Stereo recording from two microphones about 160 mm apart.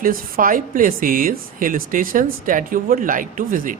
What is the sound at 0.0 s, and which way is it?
Speech, 60° right (ahead or behind).